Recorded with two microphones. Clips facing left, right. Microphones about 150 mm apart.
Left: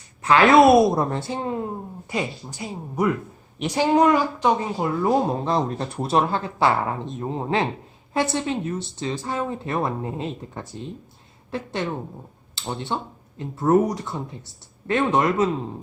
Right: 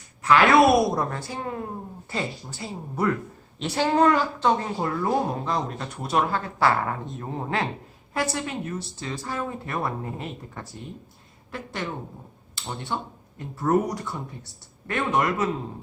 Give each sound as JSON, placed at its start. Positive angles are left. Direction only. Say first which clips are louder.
{"t": 0.2, "sound": "a woman's voice", "louder": "left 3 dB", "side_deg": 25}
{"t": 5.3, "sound": "speech", "louder": "left 5 dB", "side_deg": 30}